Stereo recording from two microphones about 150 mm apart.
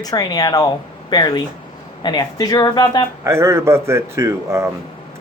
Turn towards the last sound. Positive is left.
turn(degrees=-20)  # may be behind; listen again after turning